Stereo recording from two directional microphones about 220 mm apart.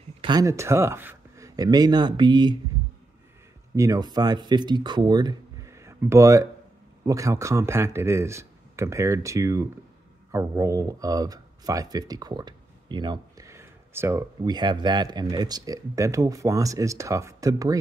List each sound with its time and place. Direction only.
0.2 s speech: 15° right (ahead or behind)
3.7 s speech: 15° right (ahead or behind)